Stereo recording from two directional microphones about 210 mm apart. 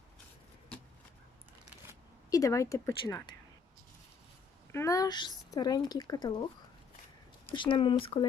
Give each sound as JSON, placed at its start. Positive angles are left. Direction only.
{"t": 2.3, "sound": "speech", "side_deg": 15}
{"t": 4.7, "sound": "speech", "side_deg": 15}
{"t": 7.5, "sound": "speech", "side_deg": 25}